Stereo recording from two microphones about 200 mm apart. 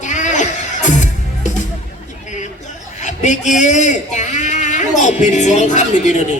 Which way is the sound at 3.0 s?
35° left (ahead or behind).